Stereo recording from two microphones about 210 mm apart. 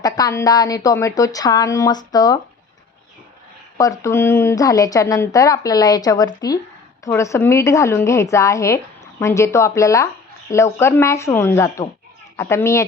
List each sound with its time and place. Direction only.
0.0 s a woman's voice: 15° left (ahead or behind)
4.0 s a woman's voice: 10° left (ahead or behind)